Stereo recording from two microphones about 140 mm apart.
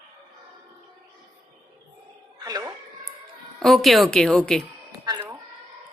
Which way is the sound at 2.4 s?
30° right (ahead or behind).